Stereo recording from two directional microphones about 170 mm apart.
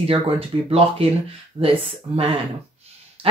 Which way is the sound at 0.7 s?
35° right (ahead or behind).